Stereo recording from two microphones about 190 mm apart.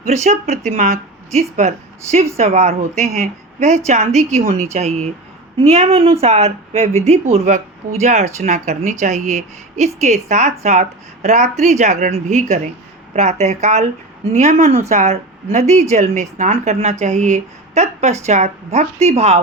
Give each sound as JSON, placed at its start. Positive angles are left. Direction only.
{"t": 0.1, "sound": "a woman's voice", "side_deg": -40}